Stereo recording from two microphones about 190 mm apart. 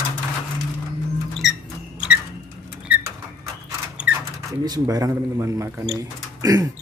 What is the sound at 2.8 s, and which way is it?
Rodents, 5° right (ahead or behind).